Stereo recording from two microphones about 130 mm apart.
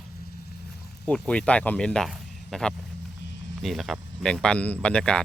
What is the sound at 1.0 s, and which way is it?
Speech, 10° left (ahead or behind).